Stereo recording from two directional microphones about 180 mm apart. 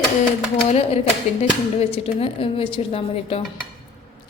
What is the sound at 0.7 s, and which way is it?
A woman's voice, 35° left (ahead or behind).